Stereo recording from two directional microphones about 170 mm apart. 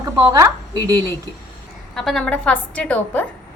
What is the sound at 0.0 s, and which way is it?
A woman's voice, 20° right (ahead or behind).